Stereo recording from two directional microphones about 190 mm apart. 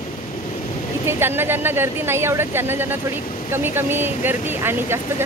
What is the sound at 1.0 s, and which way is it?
Speech, 10° right (ahead or behind).